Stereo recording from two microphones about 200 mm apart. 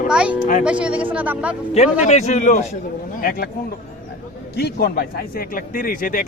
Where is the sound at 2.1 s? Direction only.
35° left (ahead or behind).